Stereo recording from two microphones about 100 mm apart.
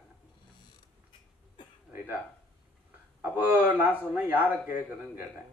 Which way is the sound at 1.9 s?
20° right (ahead or behind).